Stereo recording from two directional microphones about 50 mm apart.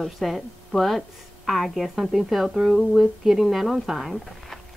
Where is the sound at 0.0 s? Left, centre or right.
Centre.